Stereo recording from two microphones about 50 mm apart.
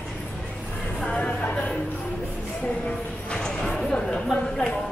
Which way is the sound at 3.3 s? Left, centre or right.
Centre.